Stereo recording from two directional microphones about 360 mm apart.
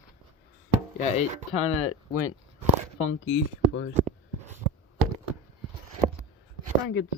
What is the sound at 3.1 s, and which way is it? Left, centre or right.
Speech, left.